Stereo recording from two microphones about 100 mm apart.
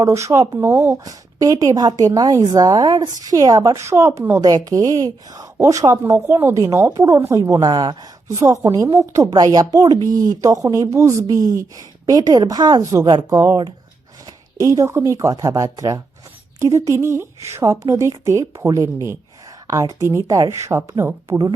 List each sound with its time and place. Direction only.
0.0 s a woman's voice: 30° right (ahead or behind)
0.6 s a woman's voice: 20° right (ahead or behind)
0.9 s a woman's voice: 35° right (ahead or behind)
8.3 s a woman's voice: 30° right (ahead or behind)
14.6 s a woman's voice: 30° right (ahead or behind)